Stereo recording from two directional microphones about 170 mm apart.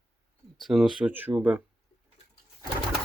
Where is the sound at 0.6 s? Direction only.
Centre (ahead or behind).